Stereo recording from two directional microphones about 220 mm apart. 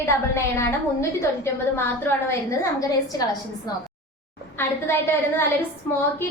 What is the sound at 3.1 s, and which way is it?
Speech, 15° left (ahead or behind).